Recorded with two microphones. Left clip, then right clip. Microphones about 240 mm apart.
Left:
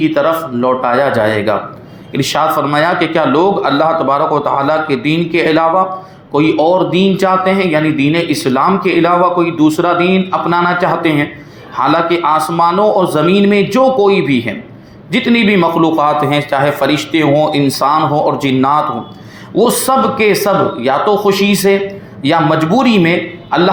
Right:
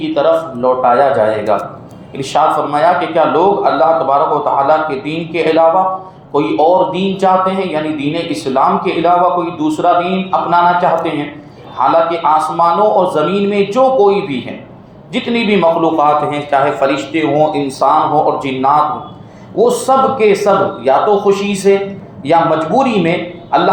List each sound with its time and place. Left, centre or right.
0.1 s speech: left
2.1 s speech: left
16.9 s a man's voice: left